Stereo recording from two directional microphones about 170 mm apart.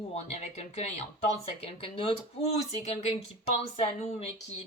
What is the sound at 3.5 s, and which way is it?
A woman's voice, 35° left (ahead or behind).